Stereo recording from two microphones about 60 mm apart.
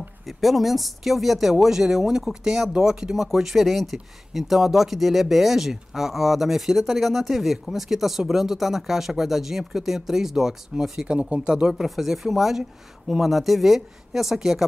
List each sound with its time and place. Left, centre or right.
0.3 s speech: centre